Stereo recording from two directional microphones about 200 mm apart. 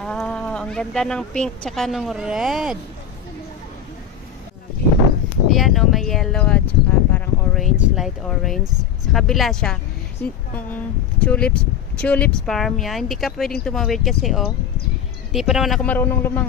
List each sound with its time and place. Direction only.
0.0 s speech: 5° left (ahead or behind)
5.5 s speech: centre (ahead or behind)